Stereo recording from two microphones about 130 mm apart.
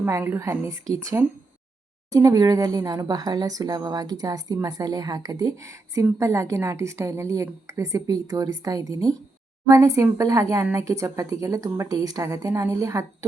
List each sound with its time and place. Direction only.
0.0 s speech: 20° right (ahead or behind)